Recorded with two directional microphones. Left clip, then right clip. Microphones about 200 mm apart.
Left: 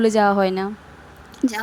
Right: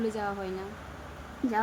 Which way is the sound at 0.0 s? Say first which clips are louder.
Left 16 dB; 50° left (ahead or behind).